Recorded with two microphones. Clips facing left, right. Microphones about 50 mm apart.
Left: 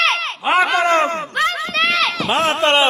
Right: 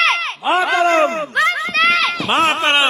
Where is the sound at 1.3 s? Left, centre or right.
Right.